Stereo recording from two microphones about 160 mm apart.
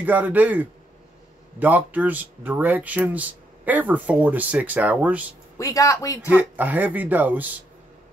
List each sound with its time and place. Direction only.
0.0 s speech: 10° right (ahead or behind)
5.6 s speech: 20° left (ahead or behind)
6.3 s speech: 10° right (ahead or behind)